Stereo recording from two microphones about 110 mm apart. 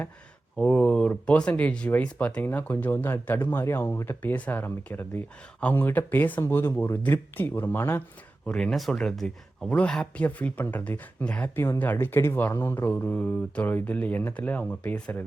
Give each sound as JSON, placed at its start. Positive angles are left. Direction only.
{"t": 0.5, "sound": "speech", "side_deg": 10}
{"t": 8.4, "sound": "speech", "side_deg": 5}